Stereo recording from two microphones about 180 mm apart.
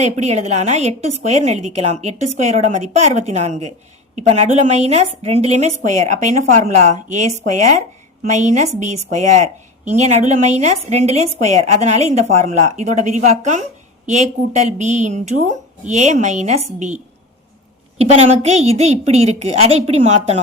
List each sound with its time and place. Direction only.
0.0 s a woman's voice: 40° right (ahead or behind)